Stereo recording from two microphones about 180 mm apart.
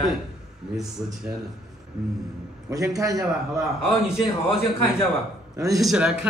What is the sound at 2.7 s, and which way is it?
Speech, 20° right (ahead or behind).